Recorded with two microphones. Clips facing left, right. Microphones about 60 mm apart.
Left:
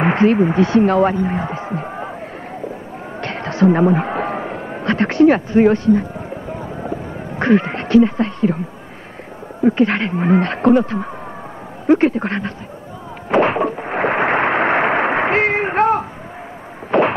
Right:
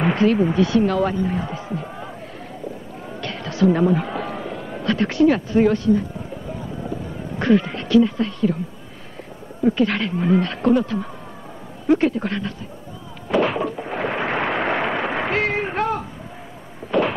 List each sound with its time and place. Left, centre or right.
0.0 s speech: left
3.2 s a sound: left
7.3 s speech: left
9.6 s speech: left
13.3 s a sound: left
16.9 s heart murmur: left